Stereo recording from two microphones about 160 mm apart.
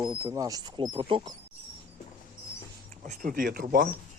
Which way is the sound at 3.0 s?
55° right (ahead or behind).